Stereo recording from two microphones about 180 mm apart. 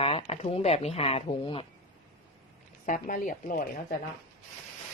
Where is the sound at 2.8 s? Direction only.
45° left (ahead or behind).